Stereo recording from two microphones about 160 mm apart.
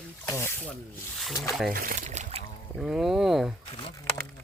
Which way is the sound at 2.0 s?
45° right (ahead or behind).